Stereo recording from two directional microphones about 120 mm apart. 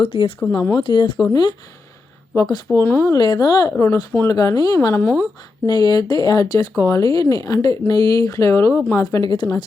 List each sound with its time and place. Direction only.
0.0 s speech: 50° left (ahead or behind); by 3.2 s 20° left (ahead or behind)
3.2 s speech: 35° left (ahead or behind)
3.7 s speech: 20° left (ahead or behind)
9.0 s speech: 30° left (ahead or behind)